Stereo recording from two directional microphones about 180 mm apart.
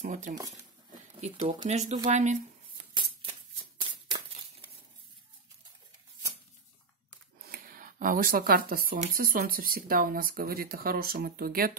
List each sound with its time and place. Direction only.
0.0 s speech: 45° right (ahead or behind)
3.9 s a sound: 30° right (ahead or behind)
7.4 s speech: 55° right (ahead or behind)